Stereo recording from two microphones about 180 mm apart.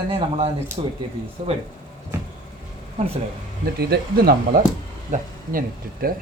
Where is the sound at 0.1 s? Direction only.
35° right (ahead or behind).